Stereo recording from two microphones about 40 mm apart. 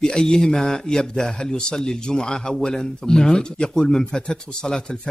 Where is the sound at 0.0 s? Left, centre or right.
Centre.